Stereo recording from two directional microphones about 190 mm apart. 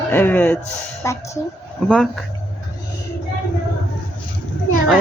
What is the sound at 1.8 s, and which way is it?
Speech, centre (ahead or behind).